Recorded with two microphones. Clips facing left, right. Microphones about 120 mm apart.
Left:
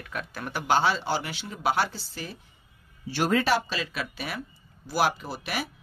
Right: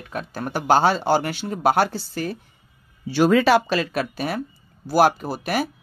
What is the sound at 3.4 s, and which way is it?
Speech, 90° right.